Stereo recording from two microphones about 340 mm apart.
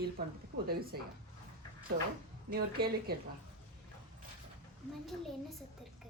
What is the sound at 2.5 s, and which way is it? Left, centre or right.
Speech, right.